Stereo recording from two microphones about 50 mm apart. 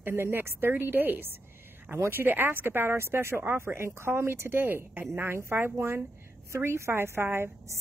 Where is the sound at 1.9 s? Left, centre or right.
Right.